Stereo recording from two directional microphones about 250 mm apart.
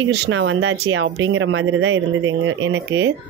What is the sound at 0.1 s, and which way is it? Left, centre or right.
A woman's voice, right.